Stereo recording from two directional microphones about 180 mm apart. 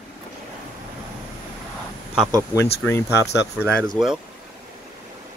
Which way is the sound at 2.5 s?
15° left (ahead or behind).